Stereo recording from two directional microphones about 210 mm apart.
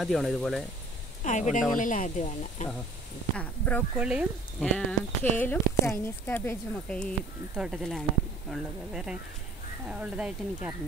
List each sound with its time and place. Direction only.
0.0 s speech: centre (ahead or behind)
1.2 s speech: 35° left (ahead or behind)
3.3 s speech: 5° left (ahead or behind)
4.0 s speech: 5° right (ahead or behind)
7.5 s speech: 5° right (ahead or behind)